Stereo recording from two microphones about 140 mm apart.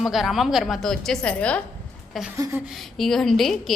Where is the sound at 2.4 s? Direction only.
15° right (ahead or behind).